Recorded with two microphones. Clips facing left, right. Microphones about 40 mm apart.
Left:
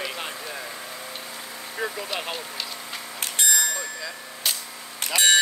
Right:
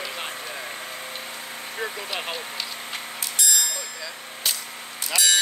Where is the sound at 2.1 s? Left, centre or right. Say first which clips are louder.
Even; centre.